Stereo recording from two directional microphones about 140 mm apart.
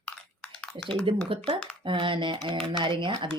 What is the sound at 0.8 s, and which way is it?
Speech, 40° right (ahead or behind).